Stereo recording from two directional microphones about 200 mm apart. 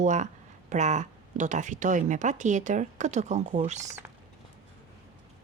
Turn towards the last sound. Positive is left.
turn(degrees=-35)  # may be behind; listen again after turning